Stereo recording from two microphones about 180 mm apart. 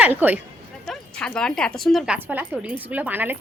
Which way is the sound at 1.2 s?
5° left (ahead or behind).